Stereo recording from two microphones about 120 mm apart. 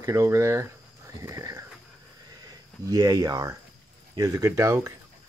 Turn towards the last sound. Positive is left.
turn(degrees=-25)  # may be behind; listen again after turning